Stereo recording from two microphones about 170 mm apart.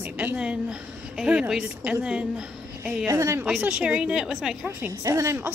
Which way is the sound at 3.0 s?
15° right (ahead or behind).